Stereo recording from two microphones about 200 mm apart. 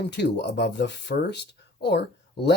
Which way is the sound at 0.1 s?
55° left (ahead or behind).